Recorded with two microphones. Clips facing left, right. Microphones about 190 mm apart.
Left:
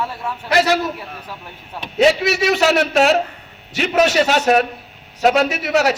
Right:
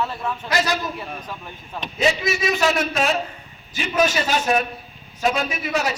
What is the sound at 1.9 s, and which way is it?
A man's voice, 75° left (ahead or behind).